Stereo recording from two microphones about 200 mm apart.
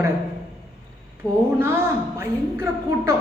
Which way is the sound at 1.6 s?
10° right (ahead or behind).